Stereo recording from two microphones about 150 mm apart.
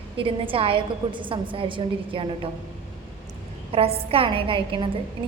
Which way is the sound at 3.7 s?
40° right (ahead or behind).